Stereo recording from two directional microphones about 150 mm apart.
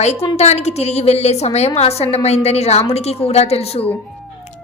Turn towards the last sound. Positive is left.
turn(degrees=45)  # may be behind; listen again after turning